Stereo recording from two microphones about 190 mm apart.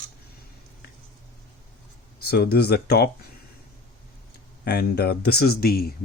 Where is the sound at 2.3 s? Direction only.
55° left (ahead or behind).